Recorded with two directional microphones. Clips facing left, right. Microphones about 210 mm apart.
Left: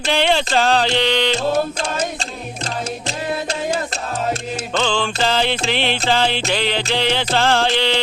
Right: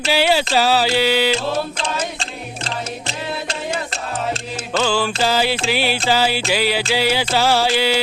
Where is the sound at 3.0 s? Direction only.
40° left (ahead or behind).